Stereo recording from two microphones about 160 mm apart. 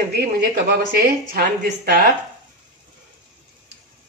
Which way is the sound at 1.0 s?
70° right (ahead or behind).